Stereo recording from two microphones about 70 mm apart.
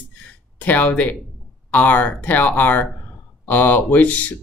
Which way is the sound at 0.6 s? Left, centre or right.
Left.